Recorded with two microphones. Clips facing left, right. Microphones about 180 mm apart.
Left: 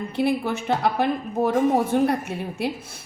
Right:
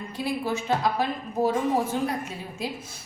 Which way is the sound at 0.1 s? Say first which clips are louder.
Left 5 dB; 65° left (ahead or behind).